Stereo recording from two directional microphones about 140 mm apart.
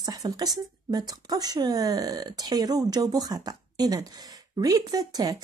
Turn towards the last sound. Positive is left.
turn(degrees=-30)  # may be behind; listen again after turning